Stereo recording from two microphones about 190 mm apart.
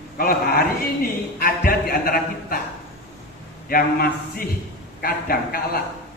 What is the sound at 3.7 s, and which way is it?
A man's voice, 50° left (ahead or behind).